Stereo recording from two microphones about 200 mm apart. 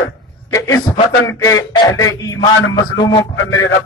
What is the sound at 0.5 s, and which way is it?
A man's voice, 15° left (ahead or behind).